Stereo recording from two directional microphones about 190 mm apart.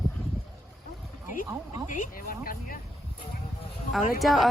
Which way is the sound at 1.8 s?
45° left (ahead or behind).